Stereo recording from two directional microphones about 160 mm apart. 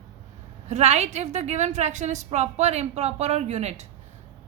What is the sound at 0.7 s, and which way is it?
A woman's voice, 45° right (ahead or behind).